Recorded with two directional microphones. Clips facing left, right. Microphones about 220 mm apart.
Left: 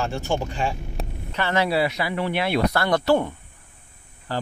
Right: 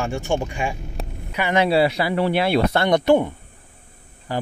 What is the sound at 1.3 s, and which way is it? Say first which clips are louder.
Speech: right 4 dB; 15° right (ahead or behind).